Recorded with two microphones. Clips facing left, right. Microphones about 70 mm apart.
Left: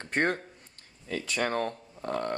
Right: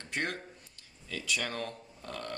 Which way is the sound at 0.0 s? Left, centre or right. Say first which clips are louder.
Left 8 dB; left.